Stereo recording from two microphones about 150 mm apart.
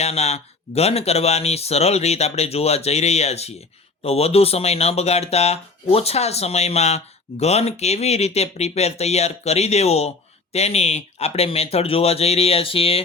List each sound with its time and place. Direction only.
0.0 s speech: 45° left (ahead or behind)